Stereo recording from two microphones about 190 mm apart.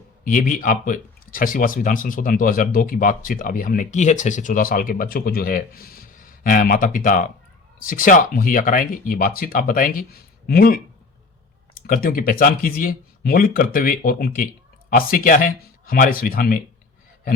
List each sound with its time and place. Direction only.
0.3 s speech: 45° left (ahead or behind)